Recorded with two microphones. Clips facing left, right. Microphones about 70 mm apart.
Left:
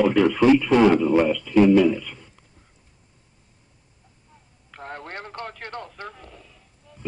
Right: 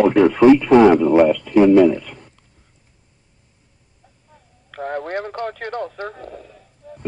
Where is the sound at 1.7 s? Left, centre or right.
Right.